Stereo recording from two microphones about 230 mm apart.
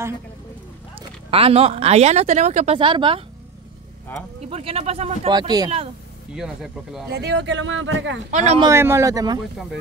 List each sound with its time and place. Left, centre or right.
0.9 s speech: right
4.4 s speech: right
6.3 s speech: centre
7.1 s speech: right
8.3 s speech: right
8.5 s speech: centre